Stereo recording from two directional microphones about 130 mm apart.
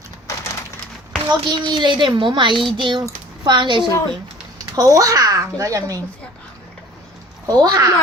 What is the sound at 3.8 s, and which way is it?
Speech, 25° left (ahead or behind).